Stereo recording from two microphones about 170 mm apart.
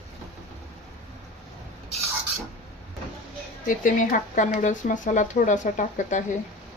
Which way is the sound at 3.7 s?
50° left (ahead or behind).